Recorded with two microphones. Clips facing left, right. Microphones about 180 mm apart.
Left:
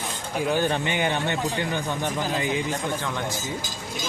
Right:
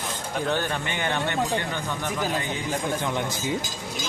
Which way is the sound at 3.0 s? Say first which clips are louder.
Right 3 dB; 15° right (ahead or behind).